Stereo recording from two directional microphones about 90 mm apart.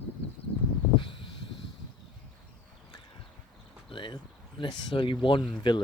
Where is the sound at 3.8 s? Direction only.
70° left (ahead or behind).